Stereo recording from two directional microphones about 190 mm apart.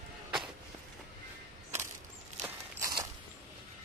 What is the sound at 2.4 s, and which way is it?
Walk, 20° right (ahead or behind).